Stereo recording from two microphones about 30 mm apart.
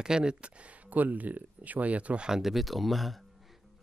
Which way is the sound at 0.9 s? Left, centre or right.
Right.